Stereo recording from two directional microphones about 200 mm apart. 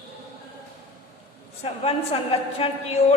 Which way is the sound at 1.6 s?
30° left (ahead or behind).